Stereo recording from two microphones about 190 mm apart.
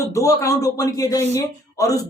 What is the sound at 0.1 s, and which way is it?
Speech, 15° left (ahead or behind).